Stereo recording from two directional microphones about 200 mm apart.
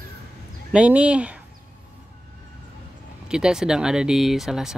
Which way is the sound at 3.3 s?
5° right (ahead or behind).